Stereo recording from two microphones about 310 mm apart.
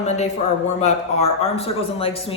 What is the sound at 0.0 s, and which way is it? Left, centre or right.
A man's voice, left.